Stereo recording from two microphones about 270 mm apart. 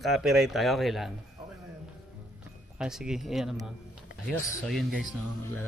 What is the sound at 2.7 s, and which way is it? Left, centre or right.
Speech, centre.